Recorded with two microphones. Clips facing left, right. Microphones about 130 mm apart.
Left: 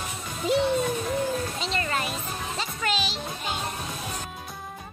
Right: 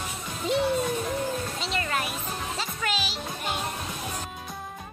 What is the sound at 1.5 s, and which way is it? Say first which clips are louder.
Music: left 1 dB; centre (ahead or behind).